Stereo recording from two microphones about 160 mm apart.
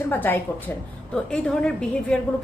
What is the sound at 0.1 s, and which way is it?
A woman's voice, 10° left (ahead or behind).